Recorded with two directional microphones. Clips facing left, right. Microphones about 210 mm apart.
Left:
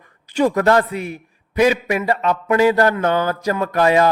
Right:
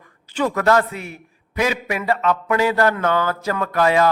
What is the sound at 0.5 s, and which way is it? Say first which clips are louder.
Speech: right 1 dB; 35° left (ahead or behind).